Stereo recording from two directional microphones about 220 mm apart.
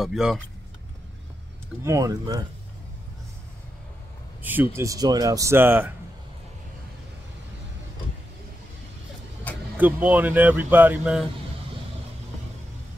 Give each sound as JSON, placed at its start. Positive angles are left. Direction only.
{"t": 0.0, "sound": "speech", "side_deg": 0}
{"t": 1.9, "sound": "speech", "side_deg": -15}
{"t": 4.4, "sound": "speech", "side_deg": -10}
{"t": 9.8, "sound": "speech", "side_deg": -5}